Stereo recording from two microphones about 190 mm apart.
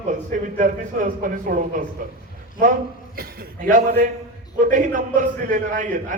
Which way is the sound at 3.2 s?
45° right (ahead or behind).